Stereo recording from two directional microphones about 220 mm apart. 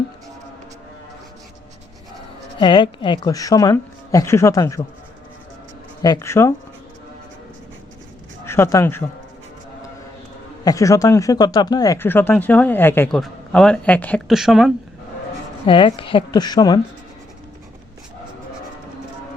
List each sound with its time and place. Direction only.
2.6 s speech: 20° left (ahead or behind)
6.0 s speech: 15° left (ahead or behind)
8.4 s speech: 10° left (ahead or behind)
10.6 s speech: 15° left (ahead or behind); by 14.7 s centre (ahead or behind)
15.6 s a woman's voice: 25° left (ahead or behind)